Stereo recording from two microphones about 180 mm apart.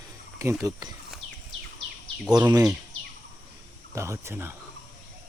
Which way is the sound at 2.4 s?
20° right (ahead or behind).